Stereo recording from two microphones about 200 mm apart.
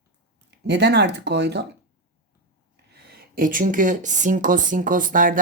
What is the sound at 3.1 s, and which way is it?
Speech, 45° right (ahead or behind).